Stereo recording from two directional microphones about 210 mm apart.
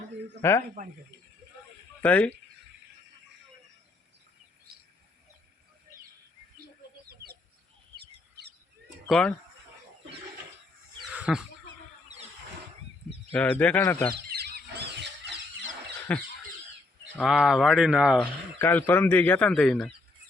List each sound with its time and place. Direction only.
0.4 s speech: 10° left (ahead or behind)
0.8 s speech: 40° right (ahead or behind)
2.0 s speech: 5° left (ahead or behind)
4.7 s bird: 50° right (ahead or behind)
8.4 s bird: 50° right (ahead or behind)
9.0 s speech: 5° left (ahead or behind)
11.1 s fowl: 5° right (ahead or behind)
13.3 s speech: 5° left (ahead or behind)
14.3 s squeal: 45° right (ahead or behind)
16.1 s speech: 5° left (ahead or behind)
18.2 s speech: 10° left (ahead or behind)